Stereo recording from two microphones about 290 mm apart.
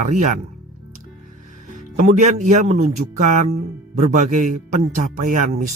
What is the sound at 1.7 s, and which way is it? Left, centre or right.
A man's voice, right.